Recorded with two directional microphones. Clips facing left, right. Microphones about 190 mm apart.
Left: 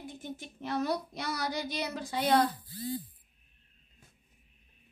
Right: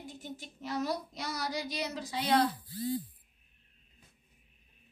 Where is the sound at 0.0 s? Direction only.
55° left (ahead or behind).